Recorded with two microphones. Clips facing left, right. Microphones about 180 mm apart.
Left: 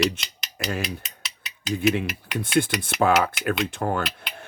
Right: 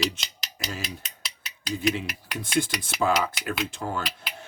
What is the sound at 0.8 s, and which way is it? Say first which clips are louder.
Mechanisms: left 6 dB; centre (ahead or behind).